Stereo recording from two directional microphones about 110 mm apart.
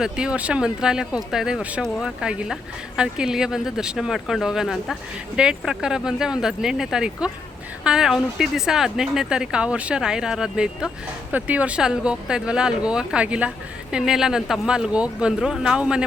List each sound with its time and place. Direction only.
0.0 s a woman's voice: 10° right (ahead or behind)